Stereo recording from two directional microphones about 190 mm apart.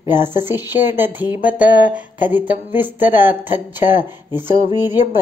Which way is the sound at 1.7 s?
45° left (ahead or behind).